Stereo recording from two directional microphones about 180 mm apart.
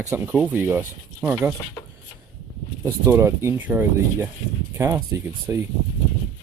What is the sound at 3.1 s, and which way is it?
Speech, 15° right (ahead or behind).